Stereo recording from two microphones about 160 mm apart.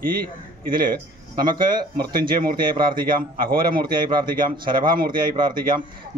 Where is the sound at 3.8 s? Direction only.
30° right (ahead or behind).